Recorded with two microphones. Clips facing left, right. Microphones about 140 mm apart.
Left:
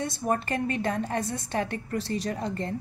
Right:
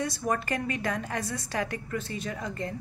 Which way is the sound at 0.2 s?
25° left (ahead or behind).